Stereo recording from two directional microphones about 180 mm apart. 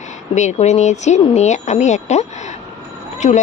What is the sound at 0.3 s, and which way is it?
A woman's voice, 40° left (ahead or behind).